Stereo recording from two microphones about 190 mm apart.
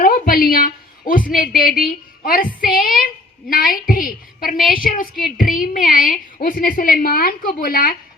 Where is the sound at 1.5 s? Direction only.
50° left (ahead or behind).